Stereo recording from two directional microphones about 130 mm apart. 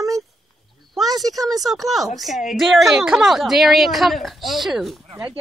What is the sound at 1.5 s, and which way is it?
Speech, centre (ahead or behind).